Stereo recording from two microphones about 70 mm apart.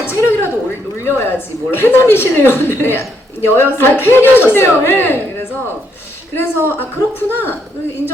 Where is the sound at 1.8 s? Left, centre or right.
Left.